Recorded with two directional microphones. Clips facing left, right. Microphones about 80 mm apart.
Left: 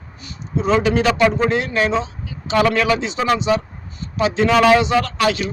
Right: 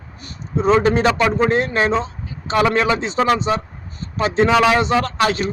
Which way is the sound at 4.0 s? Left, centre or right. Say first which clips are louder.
Right 1 dB; right.